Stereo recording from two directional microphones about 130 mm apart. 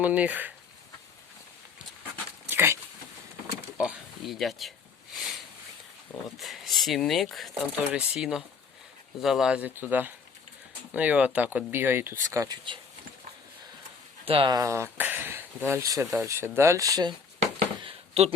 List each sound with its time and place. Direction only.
0.0 s speech: 10° right (ahead or behind)
2.5 s dog: 15° right (ahead or behind)
3.8 s a sound: 5° right (ahead or behind)
6.4 s speech: centre (ahead or behind); by 12.5 s 25° right (ahead or behind)
14.3 s speech: 45° right (ahead or behind)
14.5 s speech: 25° right (ahead or behind)
17.7 s a sound: 50° right (ahead or behind)